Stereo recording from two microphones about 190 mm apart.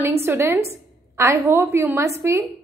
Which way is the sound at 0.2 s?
15° right (ahead or behind).